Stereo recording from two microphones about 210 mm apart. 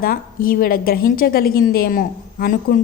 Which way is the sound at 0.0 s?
45° left (ahead or behind).